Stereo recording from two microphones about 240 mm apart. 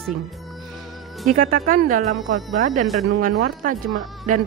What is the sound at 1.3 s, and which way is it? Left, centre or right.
Speech, right.